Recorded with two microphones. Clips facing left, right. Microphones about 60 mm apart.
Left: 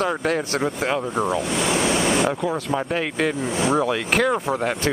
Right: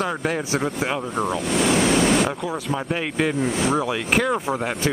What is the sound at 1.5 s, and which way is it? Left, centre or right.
Speech, right.